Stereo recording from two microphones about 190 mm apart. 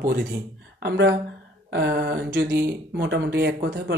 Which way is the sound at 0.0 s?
45° right (ahead or behind).